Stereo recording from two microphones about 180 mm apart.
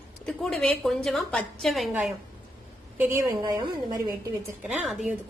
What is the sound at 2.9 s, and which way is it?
A woman's voice, 10° right (ahead or behind).